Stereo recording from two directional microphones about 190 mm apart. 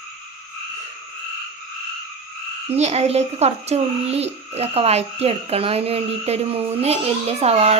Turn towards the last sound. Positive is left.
turn(degrees=-35)  # may be behind; listen again after turning